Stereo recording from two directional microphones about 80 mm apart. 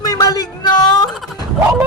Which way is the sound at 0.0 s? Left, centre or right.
Left.